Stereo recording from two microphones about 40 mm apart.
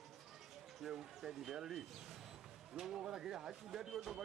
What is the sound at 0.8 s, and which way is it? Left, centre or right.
Speech, centre.